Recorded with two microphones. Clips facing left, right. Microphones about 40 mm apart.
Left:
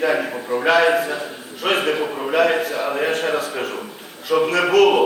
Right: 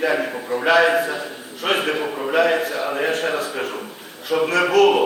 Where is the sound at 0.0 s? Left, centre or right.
Centre.